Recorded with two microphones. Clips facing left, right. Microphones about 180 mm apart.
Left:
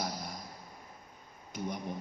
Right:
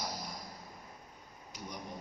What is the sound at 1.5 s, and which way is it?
Speech, 55° left (ahead or behind).